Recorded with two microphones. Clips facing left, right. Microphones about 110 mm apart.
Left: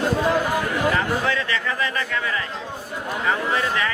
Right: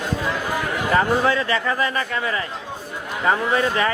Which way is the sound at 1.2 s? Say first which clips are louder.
Right 4 dB; 30° right (ahead or behind).